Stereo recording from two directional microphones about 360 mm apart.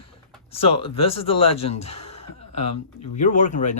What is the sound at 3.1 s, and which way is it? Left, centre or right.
Speech, left.